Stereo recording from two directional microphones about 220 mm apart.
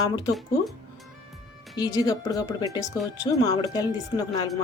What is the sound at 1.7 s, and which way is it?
Speech, 15° left (ahead or behind).